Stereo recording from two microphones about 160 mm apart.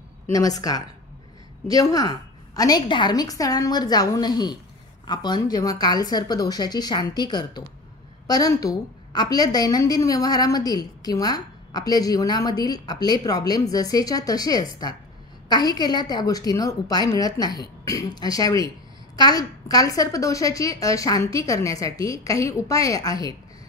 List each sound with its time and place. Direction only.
0.3 s a woman's voice: 20° left (ahead or behind)